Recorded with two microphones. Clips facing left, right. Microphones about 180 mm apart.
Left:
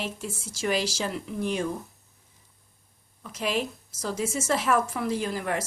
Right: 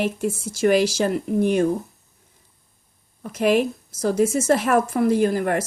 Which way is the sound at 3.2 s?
55° right (ahead or behind).